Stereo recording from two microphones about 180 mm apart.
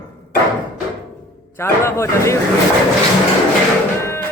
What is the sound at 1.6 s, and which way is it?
Speech, 15° left (ahead or behind).